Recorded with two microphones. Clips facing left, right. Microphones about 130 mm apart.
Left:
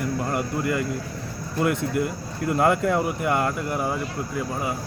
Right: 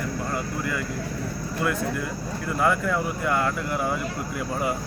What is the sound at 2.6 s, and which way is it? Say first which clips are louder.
Speech: left 3 dB; 25° left (ahead or behind).